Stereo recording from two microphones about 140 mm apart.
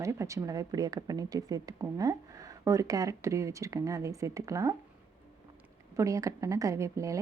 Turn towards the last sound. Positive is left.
turn(degrees=-20)  # may be behind; listen again after turning